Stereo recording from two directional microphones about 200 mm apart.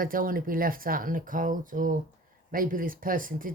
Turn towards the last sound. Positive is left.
turn(degrees=-45)  # may be behind; listen again after turning